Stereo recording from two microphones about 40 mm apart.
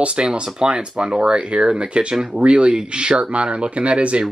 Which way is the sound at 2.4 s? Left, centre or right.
Right.